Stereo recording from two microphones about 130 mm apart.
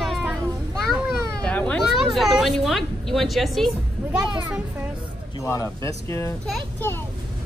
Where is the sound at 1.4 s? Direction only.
10° left (ahead or behind).